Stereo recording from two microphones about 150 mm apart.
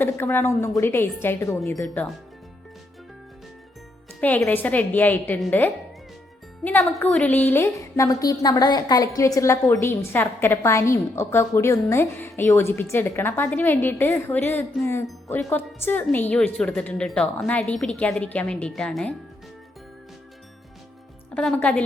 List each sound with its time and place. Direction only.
0.0 s a woman's voice: 15° left (ahead or behind)
1.9 s speech: 5° left (ahead or behind)
4.2 s a woman's voice: 10° left (ahead or behind)
21.3 s a woman's voice: 10° left (ahead or behind)